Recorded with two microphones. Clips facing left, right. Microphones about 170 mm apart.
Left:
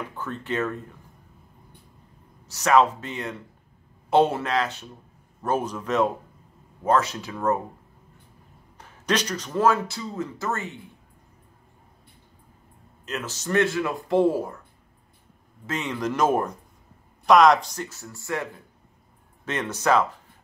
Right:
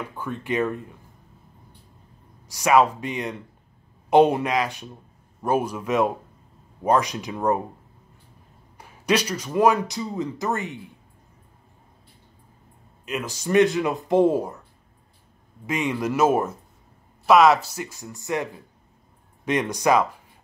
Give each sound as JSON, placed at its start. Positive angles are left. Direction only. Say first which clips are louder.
{"t": 0.1, "sound": "speech", "louder": "right 5 dB", "side_deg": -10}
{"t": 2.4, "sound": "speech", "louder": "right 1 dB", "side_deg": -10}
{"t": 8.7, "sound": "speech", "louder": "right 3 dB", "side_deg": -10}
{"t": 13.0, "sound": "speech", "louder": "right 3 dB", "side_deg": -10}
{"t": 15.6, "sound": "speech", "louder": "right 3 dB", "side_deg": -10}